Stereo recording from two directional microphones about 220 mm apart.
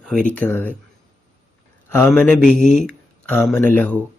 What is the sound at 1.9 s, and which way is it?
Speech, 10° left (ahead or behind).